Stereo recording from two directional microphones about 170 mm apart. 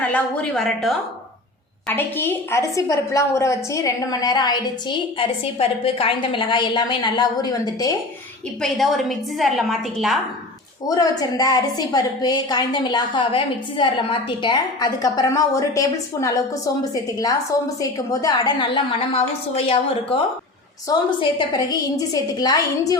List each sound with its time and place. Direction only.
0.0 s a woman's voice: 5° left (ahead or behind)
1.9 s a woman's voice: 15° left (ahead or behind)
8.6 s a woman's voice: centre (ahead or behind)
10.8 s a woman's voice: 20° left (ahead or behind)